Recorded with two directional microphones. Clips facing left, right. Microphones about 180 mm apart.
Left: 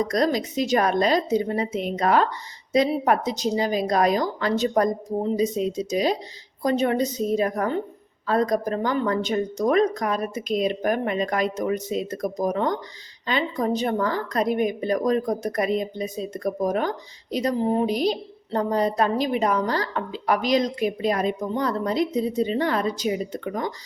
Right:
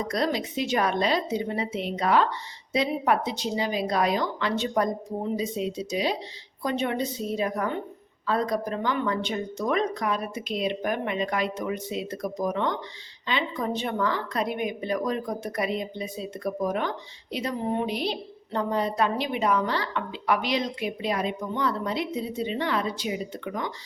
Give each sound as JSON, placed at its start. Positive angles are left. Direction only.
{"t": 0.1, "sound": "a woman's voice", "side_deg": 40}